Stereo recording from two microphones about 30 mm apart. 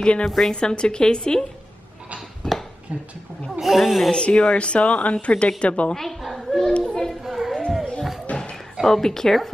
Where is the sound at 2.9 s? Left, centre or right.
Right.